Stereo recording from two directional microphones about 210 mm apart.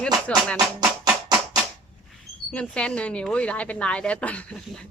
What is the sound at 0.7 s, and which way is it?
Music, 20° right (ahead or behind).